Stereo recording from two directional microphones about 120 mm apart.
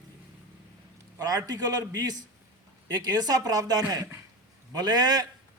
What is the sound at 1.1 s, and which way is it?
A man's voice, 30° right (ahead or behind).